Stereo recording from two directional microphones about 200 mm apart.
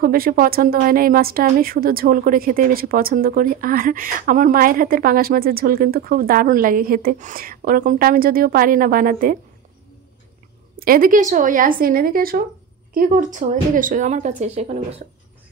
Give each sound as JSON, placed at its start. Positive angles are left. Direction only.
{"t": 0.0, "sound": "speech", "side_deg": -45}
{"t": 10.8, "sound": "speech", "side_deg": -45}